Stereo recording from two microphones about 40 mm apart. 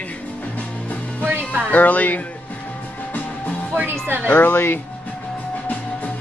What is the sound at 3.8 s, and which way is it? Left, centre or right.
Speech, right.